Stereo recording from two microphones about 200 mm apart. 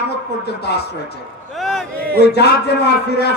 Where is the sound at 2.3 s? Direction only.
55° left (ahead or behind).